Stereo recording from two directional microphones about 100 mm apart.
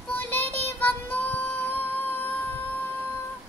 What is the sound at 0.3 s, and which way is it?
Child singing, 20° left (ahead or behind).